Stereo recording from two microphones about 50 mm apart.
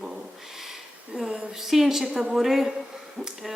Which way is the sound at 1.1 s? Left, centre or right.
Centre.